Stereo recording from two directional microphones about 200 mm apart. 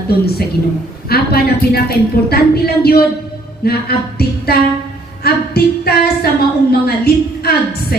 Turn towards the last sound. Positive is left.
turn(degrees=50)  # may be behind; listen again after turning